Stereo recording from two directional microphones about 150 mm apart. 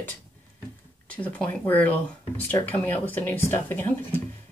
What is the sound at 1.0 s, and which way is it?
Speech, 10° left (ahead or behind).